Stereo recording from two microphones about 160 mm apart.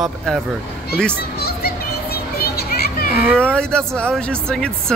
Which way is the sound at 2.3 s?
70° left (ahead or behind).